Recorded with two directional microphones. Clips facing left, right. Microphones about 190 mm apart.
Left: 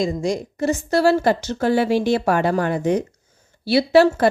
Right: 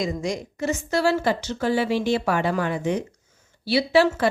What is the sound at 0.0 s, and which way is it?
A woman's voice, 30° left (ahead or behind).